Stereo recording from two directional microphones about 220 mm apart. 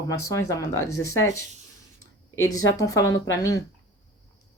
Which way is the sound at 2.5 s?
15° left (ahead or behind).